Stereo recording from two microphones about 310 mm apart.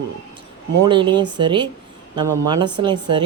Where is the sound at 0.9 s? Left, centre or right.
Centre.